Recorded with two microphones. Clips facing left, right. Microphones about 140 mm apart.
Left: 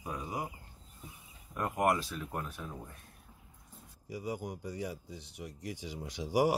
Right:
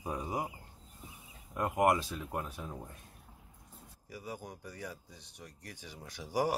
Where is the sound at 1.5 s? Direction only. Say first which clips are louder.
Right 2 dB; 20° right (ahead or behind).